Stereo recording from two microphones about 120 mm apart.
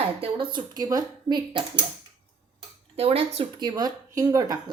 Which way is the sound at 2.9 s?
55° right (ahead or behind).